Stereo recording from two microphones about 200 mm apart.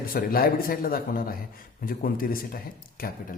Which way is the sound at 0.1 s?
45° left (ahead or behind).